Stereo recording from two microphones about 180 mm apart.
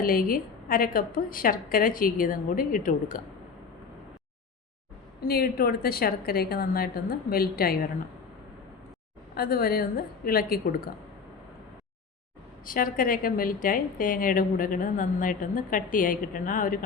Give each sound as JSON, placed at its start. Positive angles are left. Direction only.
{"t": 0.0, "sound": "a woman's voice", "side_deg": 55}
{"t": 5.2, "sound": "a woman's voice", "side_deg": 55}
{"t": 9.3, "sound": "a woman's voice", "side_deg": 55}
{"t": 12.6, "sound": "a woman's voice", "side_deg": 50}